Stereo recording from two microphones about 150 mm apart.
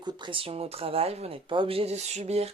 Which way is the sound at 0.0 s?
35° right (ahead or behind).